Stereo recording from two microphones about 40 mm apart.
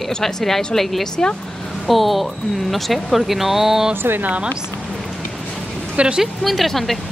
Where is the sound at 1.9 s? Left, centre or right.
Centre.